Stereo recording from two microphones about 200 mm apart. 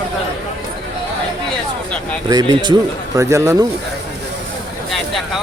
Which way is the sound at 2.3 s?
20° right (ahead or behind).